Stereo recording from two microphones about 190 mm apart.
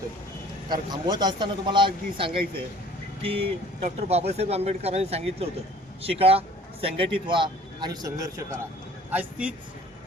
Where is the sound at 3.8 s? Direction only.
30° right (ahead or behind); by 9.5 s 10° right (ahead or behind).